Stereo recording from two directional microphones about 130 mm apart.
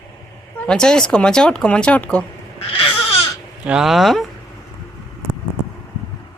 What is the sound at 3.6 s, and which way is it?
Speech, 5° right (ahead or behind).